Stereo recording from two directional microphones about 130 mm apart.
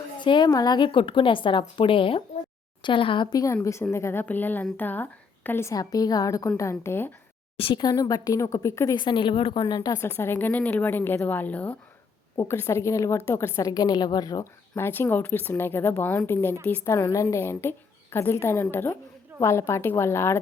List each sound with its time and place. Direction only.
0.2 s a woman's voice: 35° left (ahead or behind); by 7.1 s 20° left (ahead or behind)
7.6 s a woman's voice: 35° left (ahead or behind)
9.0 s a woman's voice: 35° left (ahead or behind)
10.0 s a woman's voice: 20° left (ahead or behind)